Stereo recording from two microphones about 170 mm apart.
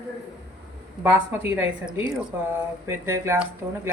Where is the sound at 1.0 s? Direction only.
15° right (ahead or behind).